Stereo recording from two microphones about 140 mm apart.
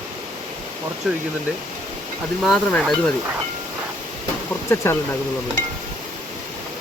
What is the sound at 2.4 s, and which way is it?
Speech, centre (ahead or behind).